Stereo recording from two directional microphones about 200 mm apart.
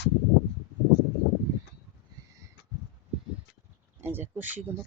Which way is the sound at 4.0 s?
10° right (ahead or behind).